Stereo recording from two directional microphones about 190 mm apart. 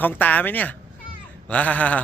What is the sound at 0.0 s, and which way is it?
Speech, 10° left (ahead or behind).